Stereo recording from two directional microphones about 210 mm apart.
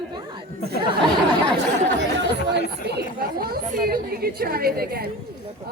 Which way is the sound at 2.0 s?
55° right (ahead or behind).